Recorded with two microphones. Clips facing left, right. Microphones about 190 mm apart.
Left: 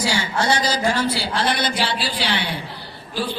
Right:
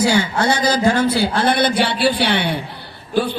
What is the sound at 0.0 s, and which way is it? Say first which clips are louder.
A man's voice: right 6 dB; 55° right (ahead or behind).